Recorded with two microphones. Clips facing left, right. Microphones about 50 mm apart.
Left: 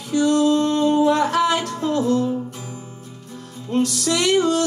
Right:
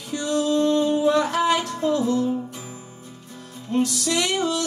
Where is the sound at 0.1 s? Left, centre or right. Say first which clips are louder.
Left 6 dB; left.